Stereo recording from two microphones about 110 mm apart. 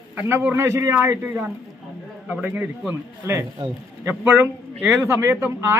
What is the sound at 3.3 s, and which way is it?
A man's voice, 25° right (ahead or behind).